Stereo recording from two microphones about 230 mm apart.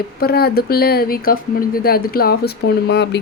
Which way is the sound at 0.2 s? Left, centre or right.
Left.